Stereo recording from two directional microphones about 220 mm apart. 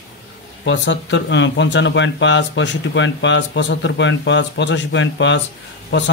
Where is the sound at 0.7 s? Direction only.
55° left (ahead or behind).